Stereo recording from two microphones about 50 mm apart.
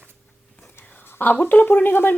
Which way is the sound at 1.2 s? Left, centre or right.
Left.